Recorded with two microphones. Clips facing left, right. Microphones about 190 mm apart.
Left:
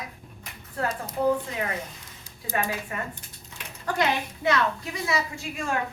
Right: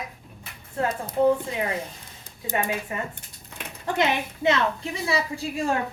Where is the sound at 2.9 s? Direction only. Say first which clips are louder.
Right 3 dB; 20° right (ahead or behind).